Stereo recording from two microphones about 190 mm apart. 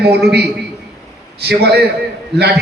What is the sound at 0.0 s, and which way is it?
A man's voice, 60° right (ahead or behind).